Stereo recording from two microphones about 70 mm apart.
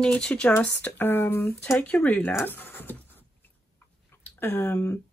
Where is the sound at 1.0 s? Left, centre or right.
Left.